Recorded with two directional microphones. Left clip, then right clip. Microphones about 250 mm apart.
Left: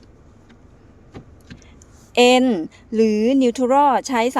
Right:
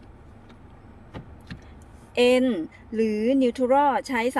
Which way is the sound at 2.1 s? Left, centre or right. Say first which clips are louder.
Left 6 dB; left.